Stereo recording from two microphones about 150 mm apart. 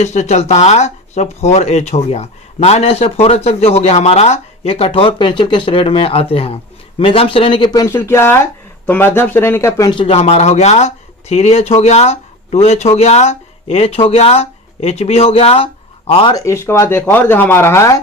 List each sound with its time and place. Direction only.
0.0 s speech: 50° left (ahead or behind); by 9.9 s 20° left (ahead or behind)
9.9 s speech: 35° left (ahead or behind)
16.3 s speech: 20° left (ahead or behind)